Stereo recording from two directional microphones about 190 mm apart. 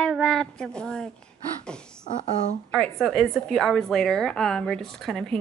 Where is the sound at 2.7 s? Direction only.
5° left (ahead or behind).